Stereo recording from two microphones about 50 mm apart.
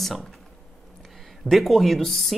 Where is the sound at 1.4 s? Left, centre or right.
Centre.